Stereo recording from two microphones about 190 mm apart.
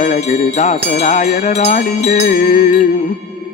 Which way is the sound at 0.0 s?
35° left (ahead or behind).